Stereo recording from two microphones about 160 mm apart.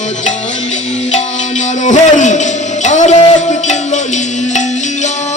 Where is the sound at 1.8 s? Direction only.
50° left (ahead or behind).